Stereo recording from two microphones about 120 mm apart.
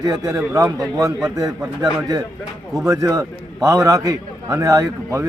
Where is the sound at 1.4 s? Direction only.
30° right (ahead or behind).